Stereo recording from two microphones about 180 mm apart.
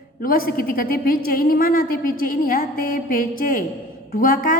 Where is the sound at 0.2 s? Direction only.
55° left (ahead or behind).